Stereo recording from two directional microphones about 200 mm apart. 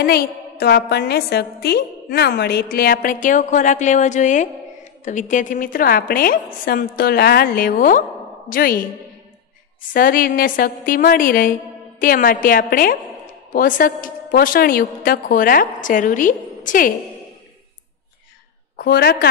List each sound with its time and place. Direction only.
0.0 s a woman's voice: 50° left (ahead or behind)
9.8 s a woman's voice: 45° left (ahead or behind)
18.8 s a woman's voice: 50° left (ahead or behind)